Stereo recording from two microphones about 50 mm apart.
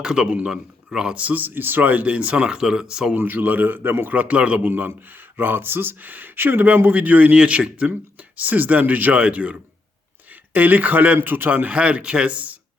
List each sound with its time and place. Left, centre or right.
0.0 s a man's voice: centre
1.1 s speech: right; by 3.2 s centre
3.2 s speech: right
4.1 s speech: right
4.7 s speech: right
7.3 s speech: right
8.4 s speech: right